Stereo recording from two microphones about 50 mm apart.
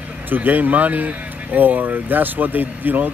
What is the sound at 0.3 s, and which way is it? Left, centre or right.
Speech, right.